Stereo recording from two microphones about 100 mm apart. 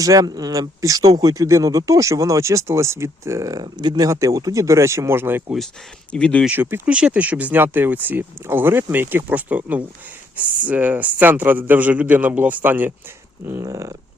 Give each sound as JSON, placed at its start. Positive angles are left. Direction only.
{"t": 0.0, "sound": "speech", "side_deg": -35}
{"t": 6.1, "sound": "speech", "side_deg": 10}
{"t": 6.5, "sound": "speech", "side_deg": -20}